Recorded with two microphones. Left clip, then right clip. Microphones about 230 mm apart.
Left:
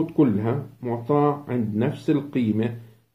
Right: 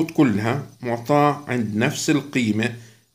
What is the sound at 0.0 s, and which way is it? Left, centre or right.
Speech, right.